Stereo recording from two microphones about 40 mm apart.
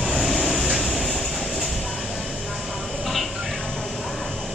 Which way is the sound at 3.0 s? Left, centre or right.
Centre.